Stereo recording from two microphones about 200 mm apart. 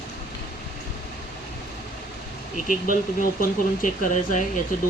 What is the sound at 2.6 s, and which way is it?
Speech, 40° left (ahead or behind).